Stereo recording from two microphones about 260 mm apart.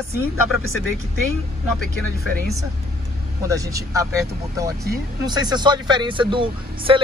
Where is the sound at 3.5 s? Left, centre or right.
Centre.